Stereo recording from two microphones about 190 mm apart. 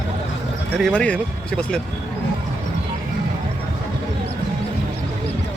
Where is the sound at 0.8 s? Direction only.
5° left (ahead or behind).